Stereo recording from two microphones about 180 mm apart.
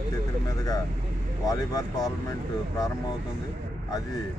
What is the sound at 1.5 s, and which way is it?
Speech, 20° left (ahead or behind).